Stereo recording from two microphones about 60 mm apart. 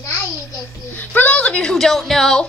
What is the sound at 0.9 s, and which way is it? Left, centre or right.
A woman's voice, left.